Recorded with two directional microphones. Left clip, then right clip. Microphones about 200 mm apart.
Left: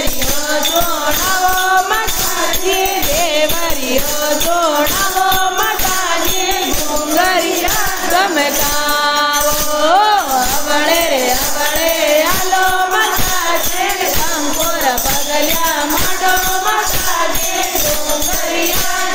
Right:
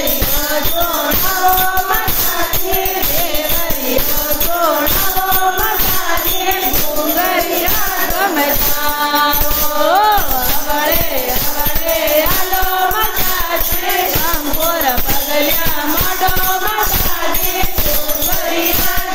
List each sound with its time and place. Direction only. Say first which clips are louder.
9.8 s music: left 1 dB; 25° left (ahead or behind)